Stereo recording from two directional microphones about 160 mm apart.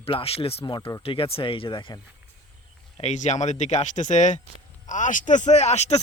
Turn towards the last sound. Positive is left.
turn(degrees=45)  # may be behind; listen again after turning